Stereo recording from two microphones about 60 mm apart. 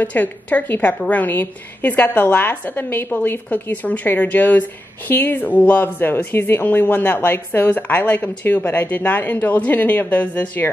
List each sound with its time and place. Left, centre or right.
0.0 s a woman's voice: left